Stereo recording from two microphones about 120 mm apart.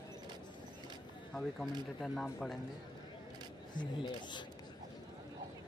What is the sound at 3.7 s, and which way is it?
Speech, 40° left (ahead or behind).